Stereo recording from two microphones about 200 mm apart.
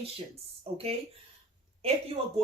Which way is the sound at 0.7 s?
30° right (ahead or behind).